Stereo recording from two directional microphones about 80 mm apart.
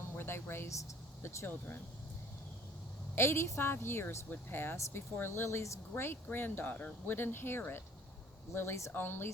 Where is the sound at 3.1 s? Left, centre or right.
Left.